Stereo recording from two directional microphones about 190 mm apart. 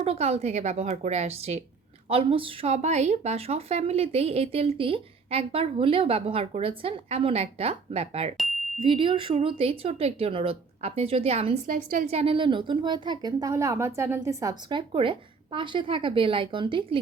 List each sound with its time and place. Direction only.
0.0 s a woman's voice: 35° right (ahead or behind)
11.7 s a woman's voice: 45° right (ahead or behind)
12.0 s a woman's voice: 30° right (ahead or behind)